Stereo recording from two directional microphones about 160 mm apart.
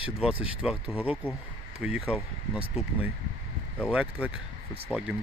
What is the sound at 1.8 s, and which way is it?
Speech, 5° right (ahead or behind).